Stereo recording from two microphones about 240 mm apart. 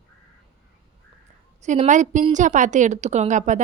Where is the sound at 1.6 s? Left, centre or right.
Right.